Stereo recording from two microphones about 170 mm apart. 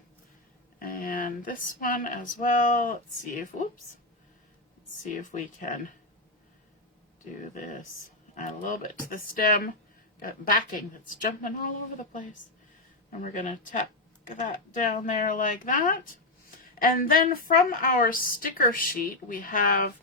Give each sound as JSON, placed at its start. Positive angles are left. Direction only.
{"t": 0.8, "sound": "speech", "side_deg": 55}
{"t": 5.0, "sound": "speech", "side_deg": 45}
{"t": 7.5, "sound": "a woman's voice", "side_deg": 45}